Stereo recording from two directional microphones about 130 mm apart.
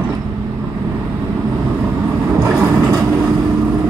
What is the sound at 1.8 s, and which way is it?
Vehicle, 10° right (ahead or behind).